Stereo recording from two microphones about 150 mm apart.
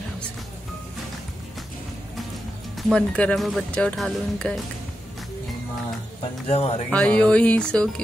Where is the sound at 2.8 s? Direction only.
5° left (ahead or behind).